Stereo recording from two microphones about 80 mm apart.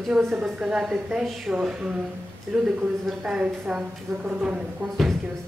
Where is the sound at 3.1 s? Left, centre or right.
Centre.